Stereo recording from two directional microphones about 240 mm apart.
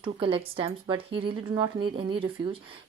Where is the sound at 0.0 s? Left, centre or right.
Right.